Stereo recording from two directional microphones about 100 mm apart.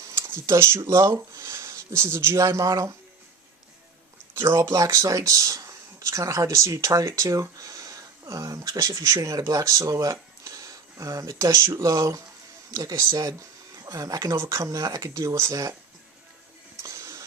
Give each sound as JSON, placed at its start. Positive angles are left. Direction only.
{"t": 0.0, "sound": "speech", "side_deg": -25}
{"t": 4.4, "sound": "speech", "side_deg": -25}
{"t": 16.8, "sound": "music", "side_deg": -30}